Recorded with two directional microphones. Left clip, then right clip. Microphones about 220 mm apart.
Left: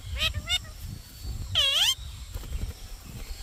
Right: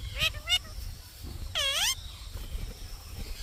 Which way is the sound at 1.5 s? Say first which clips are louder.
Left 5 dB; centre (ahead or behind).